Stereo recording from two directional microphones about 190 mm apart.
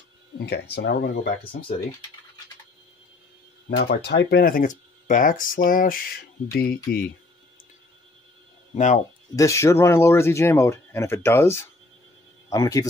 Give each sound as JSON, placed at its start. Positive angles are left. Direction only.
{"t": 0.4, "sound": "speech", "side_deg": 60}
{"t": 3.7, "sound": "speech", "side_deg": 60}
{"t": 8.7, "sound": "speech", "side_deg": 40}
{"t": 9.3, "sound": "speech", "side_deg": 15}